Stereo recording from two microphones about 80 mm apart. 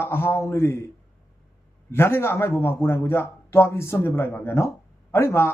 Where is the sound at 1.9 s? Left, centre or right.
Left.